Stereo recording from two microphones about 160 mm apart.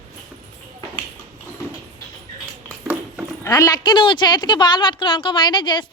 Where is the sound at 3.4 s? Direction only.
20° left (ahead or behind).